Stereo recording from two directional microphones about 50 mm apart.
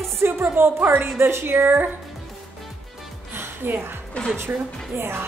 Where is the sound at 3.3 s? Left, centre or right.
Right.